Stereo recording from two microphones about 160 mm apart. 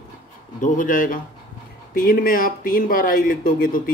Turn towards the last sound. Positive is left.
turn(degrees=60)  # may be behind; listen again after turning